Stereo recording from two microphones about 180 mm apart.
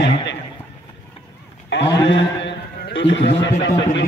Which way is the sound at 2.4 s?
90° left.